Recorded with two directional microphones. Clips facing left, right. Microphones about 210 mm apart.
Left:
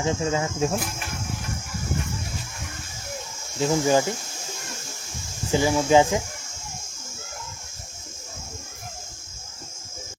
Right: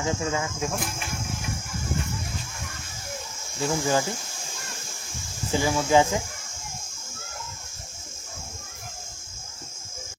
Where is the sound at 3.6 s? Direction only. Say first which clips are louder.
Left 4 dB; 20° left (ahead or behind).